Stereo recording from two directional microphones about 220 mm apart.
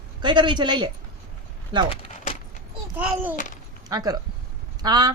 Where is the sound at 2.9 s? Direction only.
5° right (ahead or behind).